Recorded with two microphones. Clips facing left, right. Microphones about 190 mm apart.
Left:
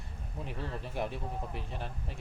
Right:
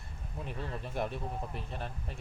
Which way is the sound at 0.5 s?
15° right (ahead or behind).